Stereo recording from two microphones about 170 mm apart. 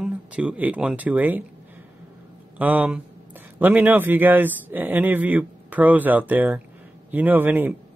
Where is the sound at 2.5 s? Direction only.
10° right (ahead or behind).